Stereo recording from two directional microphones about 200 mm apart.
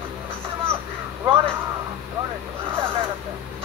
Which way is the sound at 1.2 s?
25° right (ahead or behind).